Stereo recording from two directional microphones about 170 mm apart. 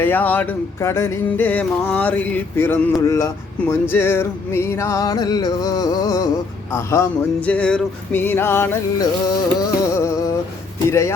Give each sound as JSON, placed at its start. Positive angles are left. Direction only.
{"t": 0.0, "sound": "music", "side_deg": 10}
{"t": 3.1, "sound": "speech", "side_deg": 15}
{"t": 6.7, "sound": "music", "side_deg": 15}